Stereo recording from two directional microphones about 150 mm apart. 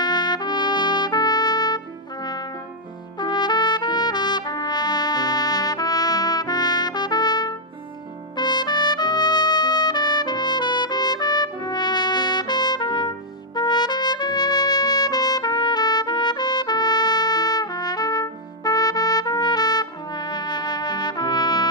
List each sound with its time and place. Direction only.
0.0 s trumpet: 30° left (ahead or behind)
3.2 s trumpet: 30° left (ahead or behind)